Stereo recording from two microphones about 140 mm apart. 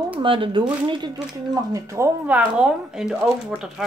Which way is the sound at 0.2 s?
35° right (ahead or behind).